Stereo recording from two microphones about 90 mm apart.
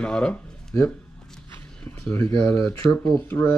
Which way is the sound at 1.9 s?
25° left (ahead or behind).